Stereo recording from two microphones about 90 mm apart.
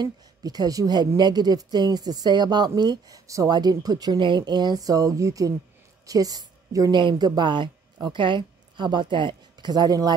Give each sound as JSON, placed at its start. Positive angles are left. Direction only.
{"t": 0.0, "sound": "a woman's voice", "side_deg": -45}
{"t": 6.9, "sound": "speech", "side_deg": -60}